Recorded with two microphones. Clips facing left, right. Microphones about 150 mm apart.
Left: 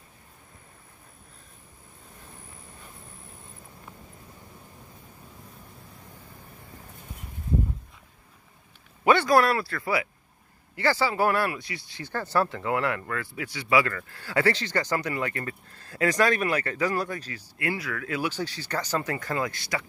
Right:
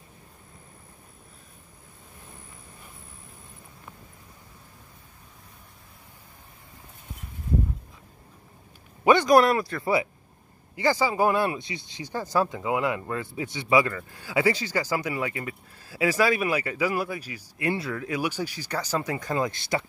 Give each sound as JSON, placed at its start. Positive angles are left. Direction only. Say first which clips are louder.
{"t": 9.0, "sound": "speech", "louder": "right 2 dB", "side_deg": -15}
{"t": 18.1, "sound": "speech", "louder": "even", "side_deg": -15}